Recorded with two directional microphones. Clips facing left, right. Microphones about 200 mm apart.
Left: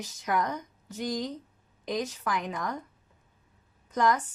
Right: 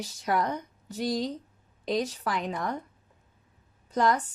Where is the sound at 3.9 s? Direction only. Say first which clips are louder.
Right 1 dB; 30° right (ahead or behind).